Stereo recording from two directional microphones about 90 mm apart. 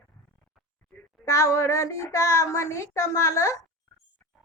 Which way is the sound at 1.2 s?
35° left (ahead or behind).